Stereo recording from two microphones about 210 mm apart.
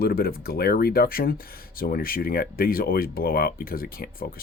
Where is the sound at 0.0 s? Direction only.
45° left (ahead or behind).